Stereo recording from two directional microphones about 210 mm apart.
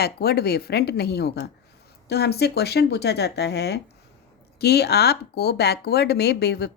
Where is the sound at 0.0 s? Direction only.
50° left (ahead or behind).